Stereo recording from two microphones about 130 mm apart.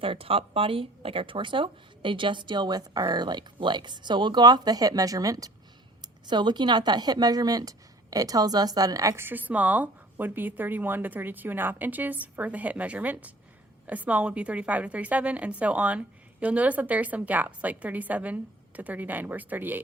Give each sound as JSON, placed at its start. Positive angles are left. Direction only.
{"t": 0.0, "sound": "a woman's voice", "side_deg": -45}